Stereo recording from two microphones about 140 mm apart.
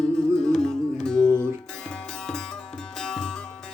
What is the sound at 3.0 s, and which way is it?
Music, 5° left (ahead or behind).